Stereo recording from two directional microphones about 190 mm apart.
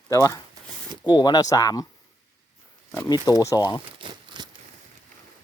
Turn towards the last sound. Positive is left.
turn(degrees=-25)  # may be behind; listen again after turning